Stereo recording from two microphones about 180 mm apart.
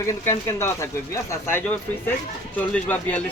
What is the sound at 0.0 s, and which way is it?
Speech, 15° left (ahead or behind).